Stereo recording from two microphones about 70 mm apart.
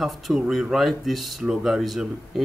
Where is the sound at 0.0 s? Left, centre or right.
Centre.